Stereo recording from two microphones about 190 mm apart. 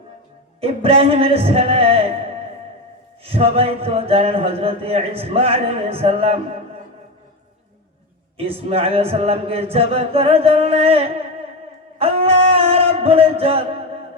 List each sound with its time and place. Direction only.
0.6 s music: 30° right (ahead or behind)
3.2 s a man's voice: 30° right (ahead or behind)
8.4 s a man's voice: 30° right (ahead or behind)
11.9 s a sound: 30° right (ahead or behind)